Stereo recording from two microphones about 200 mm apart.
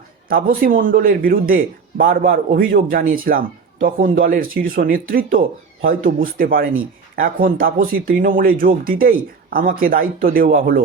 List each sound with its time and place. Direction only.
0.3 s speech: 45° right (ahead or behind)